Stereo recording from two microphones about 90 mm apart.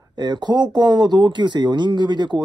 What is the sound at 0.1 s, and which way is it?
Speech, 55° right (ahead or behind).